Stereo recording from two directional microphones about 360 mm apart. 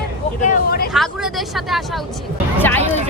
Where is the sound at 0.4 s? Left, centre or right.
Left.